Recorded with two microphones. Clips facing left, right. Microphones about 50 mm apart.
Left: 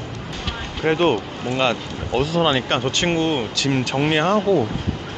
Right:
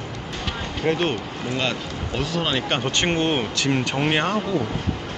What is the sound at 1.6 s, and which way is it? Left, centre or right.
Speech, centre.